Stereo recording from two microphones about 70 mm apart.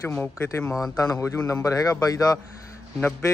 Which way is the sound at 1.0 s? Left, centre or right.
Left.